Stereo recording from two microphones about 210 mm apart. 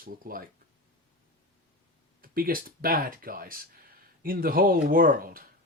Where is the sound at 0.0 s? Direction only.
45° right (ahead or behind).